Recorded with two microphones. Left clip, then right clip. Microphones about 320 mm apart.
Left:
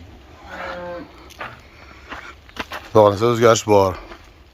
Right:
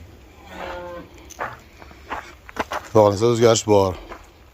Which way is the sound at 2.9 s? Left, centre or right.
Centre.